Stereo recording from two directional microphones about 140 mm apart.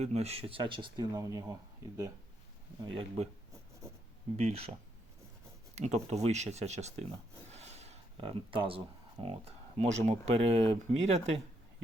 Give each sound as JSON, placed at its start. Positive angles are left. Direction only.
{"t": 0.0, "sound": "speech", "side_deg": -50}
{"t": 2.9, "sound": "speech", "side_deg": -40}
{"t": 4.4, "sound": "speech", "side_deg": -45}
{"t": 5.7, "sound": "speech", "side_deg": -50}